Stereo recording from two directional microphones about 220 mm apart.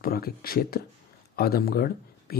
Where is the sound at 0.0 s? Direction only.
40° left (ahead or behind).